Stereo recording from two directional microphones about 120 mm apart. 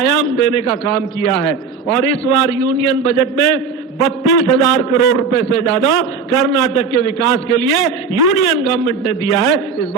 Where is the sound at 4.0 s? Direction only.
5° left (ahead or behind).